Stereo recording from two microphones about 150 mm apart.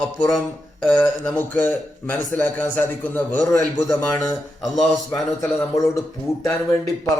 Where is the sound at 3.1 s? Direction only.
10° left (ahead or behind).